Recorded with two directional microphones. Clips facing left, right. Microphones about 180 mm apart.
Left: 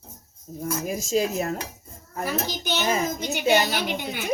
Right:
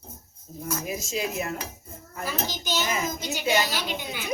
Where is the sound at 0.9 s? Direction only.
45° left (ahead or behind).